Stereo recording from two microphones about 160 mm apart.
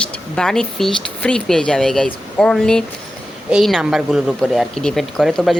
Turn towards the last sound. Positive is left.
turn(degrees=0)  # may be behind; listen again after turning